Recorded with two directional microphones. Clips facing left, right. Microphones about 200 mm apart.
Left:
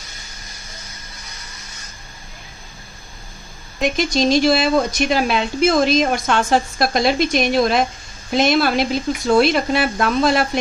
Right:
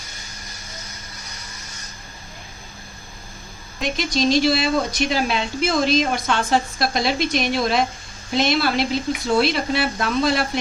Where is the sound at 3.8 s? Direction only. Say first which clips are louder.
Left 3 dB; 50° left (ahead or behind).